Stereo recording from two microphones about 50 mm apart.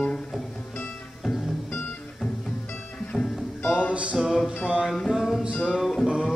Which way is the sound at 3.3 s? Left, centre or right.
Centre.